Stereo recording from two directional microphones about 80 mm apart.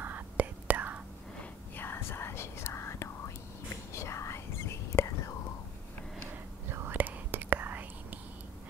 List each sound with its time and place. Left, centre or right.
0.0 s whispering: right
1.4 s whispering: left
6.3 s whispering: right